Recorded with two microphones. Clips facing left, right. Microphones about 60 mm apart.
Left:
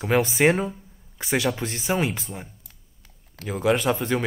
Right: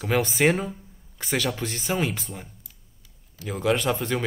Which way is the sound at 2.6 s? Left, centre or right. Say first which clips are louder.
Even; left.